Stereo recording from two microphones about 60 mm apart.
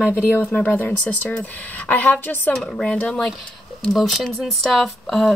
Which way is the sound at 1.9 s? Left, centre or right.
Left.